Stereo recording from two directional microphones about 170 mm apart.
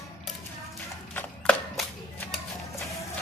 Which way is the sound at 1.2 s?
5° left (ahead or behind).